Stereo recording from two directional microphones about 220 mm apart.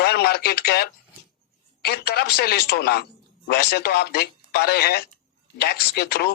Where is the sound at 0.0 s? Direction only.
45° left (ahead or behind).